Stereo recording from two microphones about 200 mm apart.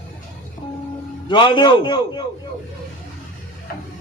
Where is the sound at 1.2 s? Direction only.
25° left (ahead or behind).